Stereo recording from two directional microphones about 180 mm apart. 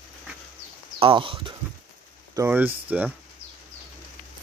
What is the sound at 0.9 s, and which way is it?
Speech, 30° right (ahead or behind).